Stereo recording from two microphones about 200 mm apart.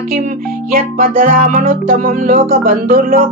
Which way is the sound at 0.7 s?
45° right (ahead or behind).